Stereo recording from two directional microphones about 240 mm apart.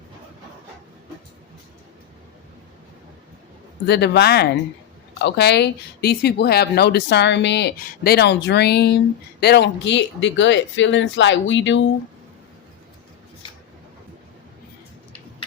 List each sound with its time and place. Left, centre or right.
3.8 s speech: left